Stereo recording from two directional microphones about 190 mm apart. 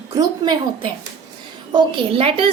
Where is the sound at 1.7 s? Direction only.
30° right (ahead or behind).